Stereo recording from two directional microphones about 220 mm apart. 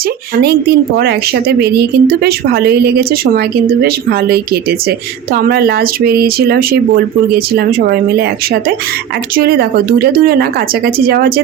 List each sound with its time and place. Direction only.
0.4 s a woman's voice: 50° right (ahead or behind)
5.3 s a woman's voice: 45° right (ahead or behind)
9.4 s a woman's voice: 45° right (ahead or behind)